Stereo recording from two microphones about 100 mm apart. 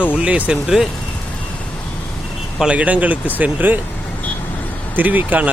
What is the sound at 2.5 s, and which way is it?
Speech, 10° right (ahead or behind).